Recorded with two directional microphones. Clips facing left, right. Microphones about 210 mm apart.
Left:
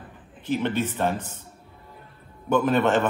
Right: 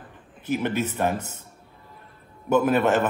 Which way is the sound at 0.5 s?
10° right (ahead or behind).